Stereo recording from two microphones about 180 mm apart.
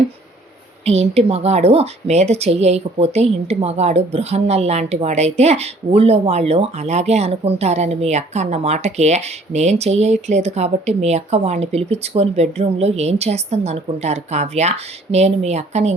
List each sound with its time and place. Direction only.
0.9 s a woman's voice: 35° right (ahead or behind)